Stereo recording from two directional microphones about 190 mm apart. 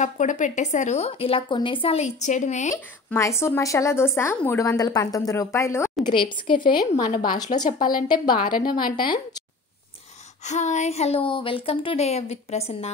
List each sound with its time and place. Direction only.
0.0 s speech: 40° left (ahead or behind)
2.7 s a woman's voice: 15° left (ahead or behind)
6.1 s speech: 25° left (ahead or behind)
6.9 s speech: 35° left (ahead or behind)
7.9 s speech: 20° left (ahead or behind)
8.4 s a woman's voice: 50° left (ahead or behind)
10.4 s speech: 40° left (ahead or behind)